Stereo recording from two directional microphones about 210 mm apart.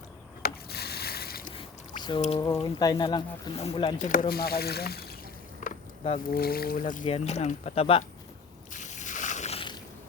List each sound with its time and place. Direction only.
0.4 s boat: 50° left (ahead or behind)
2.6 s speech: 20° left (ahead or behind)
4.1 s speech: 45° left (ahead or behind)
5.5 s speech: 40° left (ahead or behind)
7.0 s speech: 30° left (ahead or behind)
8.7 s boat: 35° left (ahead or behind)